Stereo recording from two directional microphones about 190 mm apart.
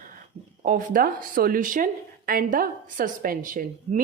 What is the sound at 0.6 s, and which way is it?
Speech, 45° right (ahead or behind).